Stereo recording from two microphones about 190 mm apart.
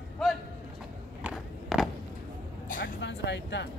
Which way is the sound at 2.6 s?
45° left (ahead or behind).